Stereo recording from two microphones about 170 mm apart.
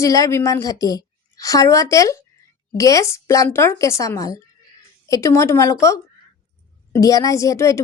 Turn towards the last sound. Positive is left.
turn(degrees=15)  # may be behind; listen again after turning